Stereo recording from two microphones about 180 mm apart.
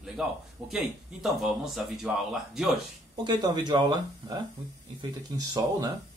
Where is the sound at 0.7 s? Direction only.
Centre (ahead or behind).